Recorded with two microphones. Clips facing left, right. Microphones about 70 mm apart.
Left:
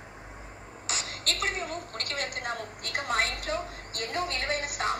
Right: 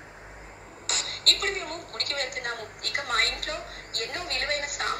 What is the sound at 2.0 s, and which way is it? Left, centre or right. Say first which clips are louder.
Speech: right 3 dB; right.